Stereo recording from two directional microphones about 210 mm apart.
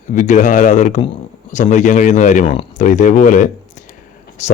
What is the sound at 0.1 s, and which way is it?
Speech, 35° left (ahead or behind).